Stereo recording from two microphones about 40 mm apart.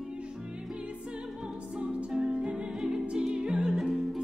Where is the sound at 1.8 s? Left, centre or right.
Right.